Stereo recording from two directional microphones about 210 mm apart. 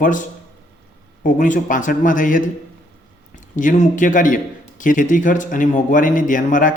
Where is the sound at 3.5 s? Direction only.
35° left (ahead or behind).